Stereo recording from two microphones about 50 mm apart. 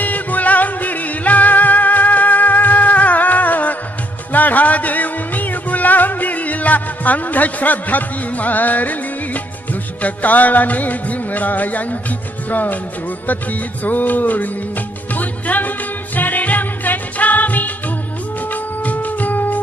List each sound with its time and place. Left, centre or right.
0.0 s music: left